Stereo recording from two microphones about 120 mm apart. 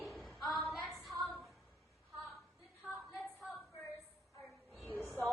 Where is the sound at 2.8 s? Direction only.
Centre (ahead or behind).